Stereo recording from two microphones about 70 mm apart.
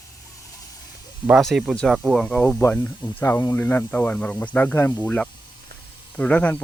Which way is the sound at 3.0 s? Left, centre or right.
Left.